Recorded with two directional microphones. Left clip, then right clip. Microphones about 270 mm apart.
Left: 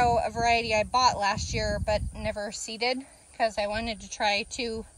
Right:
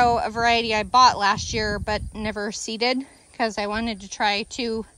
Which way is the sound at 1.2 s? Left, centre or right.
Centre.